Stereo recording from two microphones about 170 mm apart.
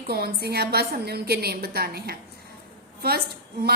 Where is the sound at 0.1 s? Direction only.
65° right (ahead or behind).